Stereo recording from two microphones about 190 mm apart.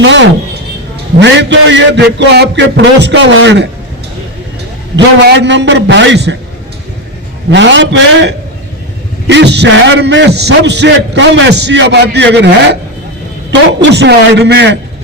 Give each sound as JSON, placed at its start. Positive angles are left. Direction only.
{"t": 0.0, "sound": "a sound", "side_deg": -70}
{"t": 1.2, "sound": "a man's voice", "side_deg": -70}
{"t": 4.9, "sound": "a man's voice", "side_deg": -65}
{"t": 7.5, "sound": "a man's voice", "side_deg": -70}
{"t": 13.5, "sound": "a man's voice", "side_deg": -65}